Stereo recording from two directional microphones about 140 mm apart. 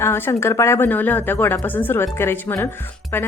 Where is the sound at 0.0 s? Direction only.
20° left (ahead or behind).